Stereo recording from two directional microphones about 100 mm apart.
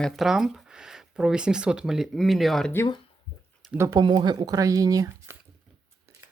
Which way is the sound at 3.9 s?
50° right (ahead or behind).